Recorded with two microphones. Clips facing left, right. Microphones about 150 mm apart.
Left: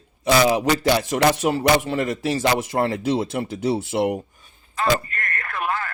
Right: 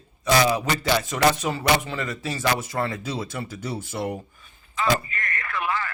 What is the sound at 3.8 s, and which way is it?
Speech, 70° left (ahead or behind).